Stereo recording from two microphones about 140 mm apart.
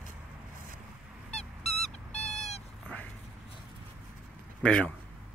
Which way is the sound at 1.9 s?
50° left (ahead or behind).